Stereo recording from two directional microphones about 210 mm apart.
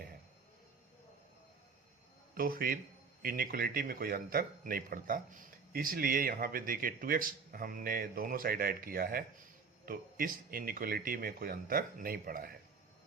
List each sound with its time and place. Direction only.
2.3 s a man's voice: 45° right (ahead or behind)